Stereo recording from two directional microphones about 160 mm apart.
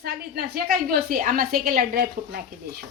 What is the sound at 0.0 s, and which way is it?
A woman's voice, 80° right.